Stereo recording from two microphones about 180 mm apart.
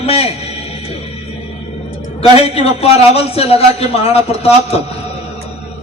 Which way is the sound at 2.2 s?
35° left (ahead or behind).